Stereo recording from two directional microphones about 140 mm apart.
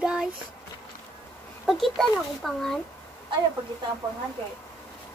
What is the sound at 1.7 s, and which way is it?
A child's voice, centre (ahead or behind).